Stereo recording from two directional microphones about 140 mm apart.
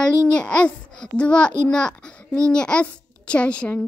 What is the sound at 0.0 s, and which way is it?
A child's voice, 5° left (ahead or behind).